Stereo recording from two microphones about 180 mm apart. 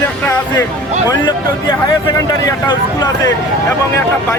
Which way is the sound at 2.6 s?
20° left (ahead or behind).